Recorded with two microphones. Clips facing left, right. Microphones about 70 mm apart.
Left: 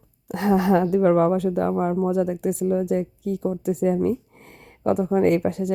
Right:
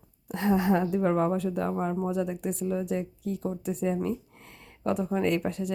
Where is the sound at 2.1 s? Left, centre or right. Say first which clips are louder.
Left 7 dB; left.